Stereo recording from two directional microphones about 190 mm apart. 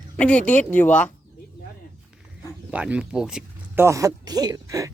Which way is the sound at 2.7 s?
5° right (ahead or behind).